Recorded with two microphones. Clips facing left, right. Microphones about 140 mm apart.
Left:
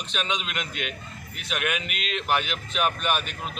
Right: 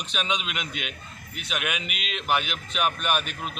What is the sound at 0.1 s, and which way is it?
Speech, 5° right (ahead or behind).